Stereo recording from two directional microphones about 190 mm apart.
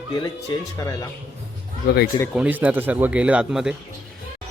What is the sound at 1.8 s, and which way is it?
Speech, 55° left (ahead or behind).